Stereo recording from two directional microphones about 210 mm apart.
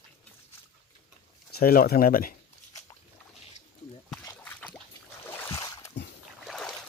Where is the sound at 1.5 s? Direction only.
45° left (ahead or behind).